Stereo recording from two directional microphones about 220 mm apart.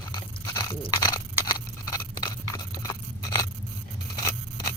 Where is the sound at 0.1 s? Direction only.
20° left (ahead or behind).